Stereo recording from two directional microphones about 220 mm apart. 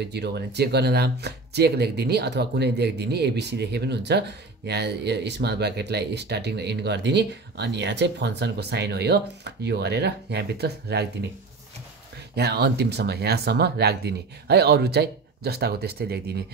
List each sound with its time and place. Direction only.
0.0 s speech: 50° right (ahead or behind)
12.4 s speech: 50° right (ahead or behind)